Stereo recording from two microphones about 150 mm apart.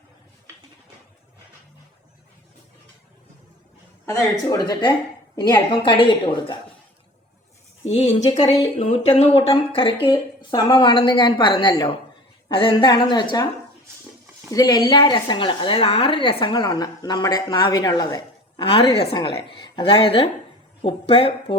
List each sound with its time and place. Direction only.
4.0 s a woman's voice: 25° left (ahead or behind)
7.9 s a woman's voice: 45° left (ahead or behind)
14.5 s a woman's voice: 25° left (ahead or behind)